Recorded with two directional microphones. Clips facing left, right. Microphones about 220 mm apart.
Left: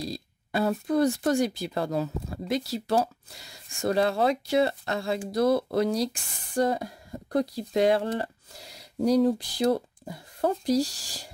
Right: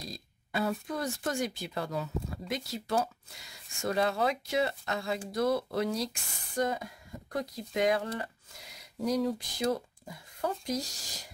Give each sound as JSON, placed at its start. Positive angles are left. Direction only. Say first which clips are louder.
{"t": 0.0, "sound": "speech", "louder": "left 9 dB", "side_deg": 35}